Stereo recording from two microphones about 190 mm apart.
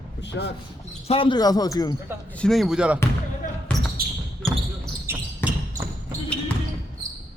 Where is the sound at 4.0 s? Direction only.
50° right (ahead or behind).